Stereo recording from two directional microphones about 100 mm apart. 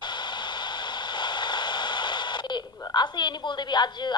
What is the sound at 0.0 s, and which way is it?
White noise, 50° left (ahead or behind).